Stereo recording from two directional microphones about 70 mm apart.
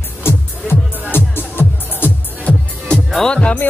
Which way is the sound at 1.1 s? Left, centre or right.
Left.